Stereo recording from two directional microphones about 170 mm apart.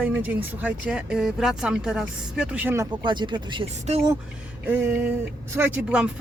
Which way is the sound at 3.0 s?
25° right (ahead or behind).